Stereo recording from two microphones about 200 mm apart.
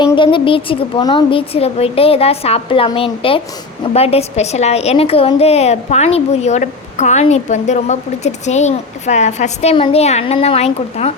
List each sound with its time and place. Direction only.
0.0 s a woman's voice: 25° left (ahead or behind)